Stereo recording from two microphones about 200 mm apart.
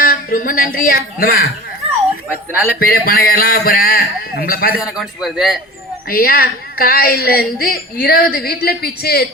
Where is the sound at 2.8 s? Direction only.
45° left (ahead or behind).